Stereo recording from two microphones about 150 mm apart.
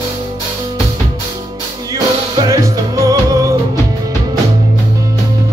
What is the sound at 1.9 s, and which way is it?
Music, 20° right (ahead or behind).